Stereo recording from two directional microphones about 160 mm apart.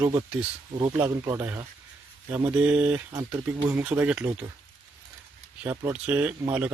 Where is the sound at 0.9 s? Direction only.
15° right (ahead or behind).